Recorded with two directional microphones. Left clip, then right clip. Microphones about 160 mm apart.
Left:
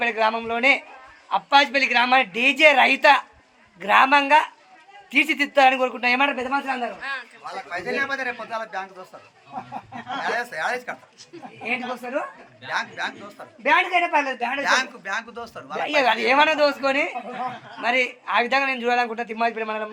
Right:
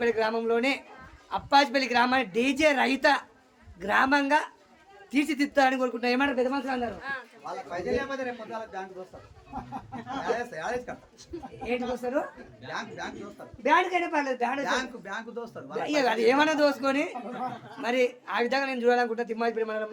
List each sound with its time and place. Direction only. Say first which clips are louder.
0.0 s a man's voice: left 4 dB; 20° left (ahead or behind)
7.4 s a man's voice: left 3 dB; 25° right (ahead or behind)
10.2 s speech: left 5 dB; 30° right (ahead or behind)
12.7 s a man's voice: left 9 dB; 30° right (ahead or behind)
13.6 s a man's voice: left 5 dB; 25° left (ahead or behind)
14.6 s a man's voice: left 8 dB; 45° right (ahead or behind)
15.8 s a man's voice: left 5 dB; 20° left (ahead or behind)